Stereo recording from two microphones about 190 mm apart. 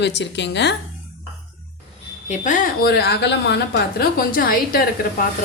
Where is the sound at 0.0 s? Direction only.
65° left (ahead or behind).